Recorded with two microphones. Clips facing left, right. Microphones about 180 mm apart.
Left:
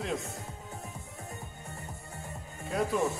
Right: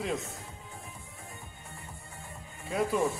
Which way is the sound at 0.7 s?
40° left (ahead or behind).